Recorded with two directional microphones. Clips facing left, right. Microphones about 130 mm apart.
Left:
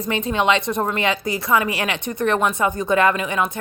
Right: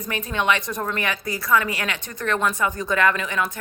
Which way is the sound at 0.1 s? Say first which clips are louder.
Left 4 dB; 25° left (ahead or behind).